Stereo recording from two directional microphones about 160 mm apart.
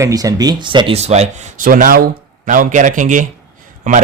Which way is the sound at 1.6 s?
60° right (ahead or behind).